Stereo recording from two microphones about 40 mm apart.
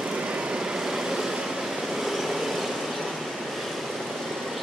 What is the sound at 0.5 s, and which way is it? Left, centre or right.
Vehicle, centre.